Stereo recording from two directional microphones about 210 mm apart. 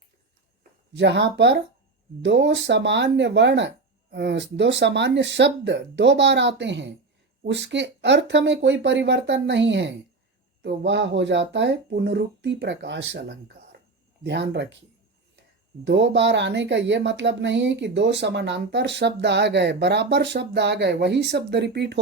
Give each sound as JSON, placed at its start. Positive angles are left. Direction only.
{"t": 0.9, "sound": "speech", "side_deg": -55}